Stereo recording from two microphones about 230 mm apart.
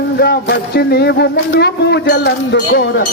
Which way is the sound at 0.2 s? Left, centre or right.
Left.